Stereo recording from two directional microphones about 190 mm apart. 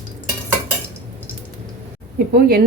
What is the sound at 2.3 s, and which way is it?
Speech, 55° right (ahead or behind).